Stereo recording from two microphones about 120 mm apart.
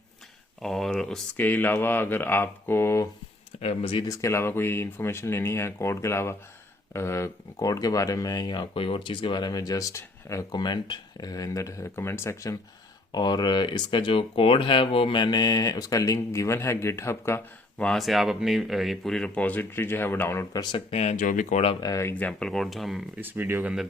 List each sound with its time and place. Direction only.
0.6 s speech: centre (ahead or behind)
1.5 s speech: 15° left (ahead or behind)
3.6 s speech: 55° left (ahead or behind)
4.1 s speech: 25° left (ahead or behind)
10.5 s speech: 40° left (ahead or behind)
13.1 s speech: 35° left (ahead or behind); by 17.4 s 20° left (ahead or behind)
17.7 s speech: 5° left (ahead or behind); by 20.5 s 20° left (ahead or behind)
20.5 s speech: 35° left (ahead or behind)
20.9 s speech: 65° left (ahead or behind); by 21.6 s 90° left
21.8 s speech: 30° left (ahead or behind)
22.0 s speech: 15° left (ahead or behind)
23.1 s speech: 15° right (ahead or behind)